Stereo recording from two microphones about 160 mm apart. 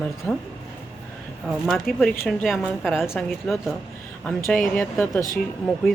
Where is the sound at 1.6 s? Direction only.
Centre (ahead or behind).